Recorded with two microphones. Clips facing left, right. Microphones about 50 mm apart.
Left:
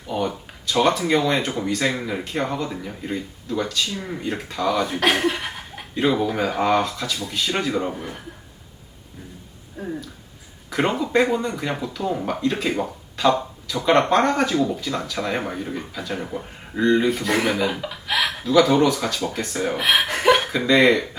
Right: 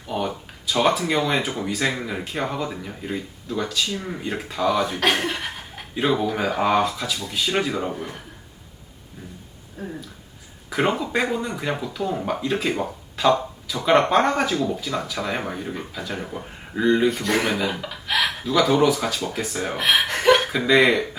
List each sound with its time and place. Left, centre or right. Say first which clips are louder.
0.1 s speech: left 1 dB; centre
9.8 s a sound: left 3 dB; centre
10.7 s speech: left 1 dB; centre